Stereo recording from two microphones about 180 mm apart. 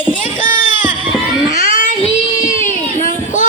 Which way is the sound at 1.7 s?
45° left (ahead or behind).